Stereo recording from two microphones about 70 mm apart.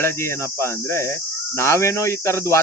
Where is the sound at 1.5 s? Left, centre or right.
Left.